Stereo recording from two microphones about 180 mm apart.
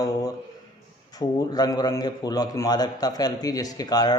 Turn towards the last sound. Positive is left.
turn(degrees=20)  # may be behind; listen again after turning